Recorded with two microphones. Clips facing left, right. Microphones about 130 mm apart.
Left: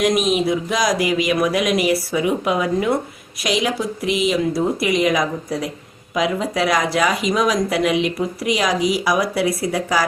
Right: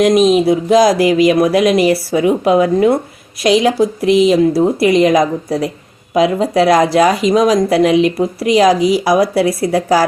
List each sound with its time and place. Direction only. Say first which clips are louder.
0.0 s speech: right 8 dB; 30° right (ahead or behind)